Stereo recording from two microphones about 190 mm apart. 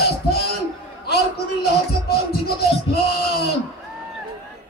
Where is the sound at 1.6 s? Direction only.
55° left (ahead or behind).